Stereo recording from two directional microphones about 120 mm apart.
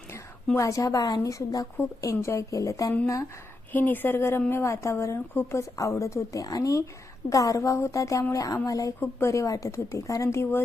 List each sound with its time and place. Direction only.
0.5 s a woman's voice: 25° left (ahead or behind)
3.7 s a woman's voice: 15° left (ahead or behind)